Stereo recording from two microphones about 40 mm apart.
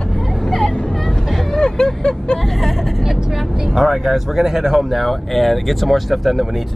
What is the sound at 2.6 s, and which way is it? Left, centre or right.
Speech, centre.